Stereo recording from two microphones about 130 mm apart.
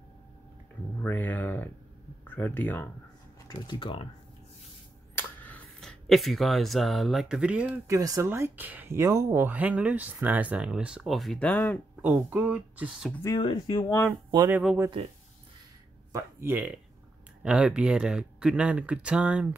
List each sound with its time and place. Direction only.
1.0 s speech: 15° left (ahead or behind)
3.4 s speech: 35° left (ahead or behind)
5.1 s a sound: 15° left (ahead or behind)
5.8 s speech: centre (ahead or behind)
7.9 s speech: 25° right (ahead or behind); by 11.8 s 10° left (ahead or behind)
12.0 s speech: 15° right (ahead or behind)
13.2 s speech: 30° left (ahead or behind)
13.7 s speech: 20° left (ahead or behind)
16.1 s speech: 20° right (ahead or behind)